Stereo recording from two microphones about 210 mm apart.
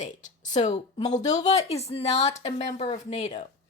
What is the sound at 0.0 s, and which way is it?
Speech, 35° left (ahead or behind).